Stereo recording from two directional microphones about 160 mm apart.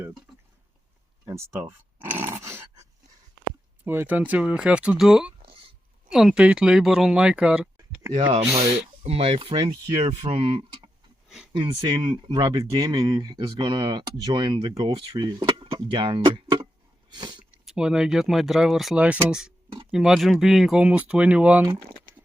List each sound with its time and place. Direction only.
1.2 s speech: 20° right (ahead or behind)
3.8 s speech: 10° right (ahead or behind)
9.0 s speech: 40° right (ahead or behind)
9.6 s speech: 20° right (ahead or behind)
10.2 s speech: 35° right (ahead or behind)
17.4 s speech: 5° right (ahead or behind)